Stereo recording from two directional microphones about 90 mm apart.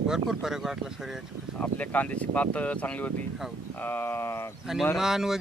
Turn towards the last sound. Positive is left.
turn(degrees=-5)  # may be behind; listen again after turning